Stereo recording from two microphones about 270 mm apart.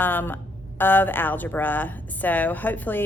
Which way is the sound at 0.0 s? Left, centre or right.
Centre.